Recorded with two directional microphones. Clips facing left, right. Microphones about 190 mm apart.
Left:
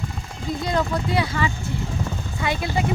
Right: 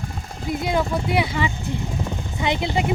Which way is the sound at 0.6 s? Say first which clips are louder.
Right 1 dB; 10° right (ahead or behind).